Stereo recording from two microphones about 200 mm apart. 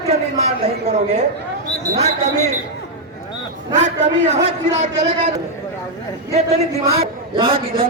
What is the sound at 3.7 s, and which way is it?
A man's voice, 35° right (ahead or behind).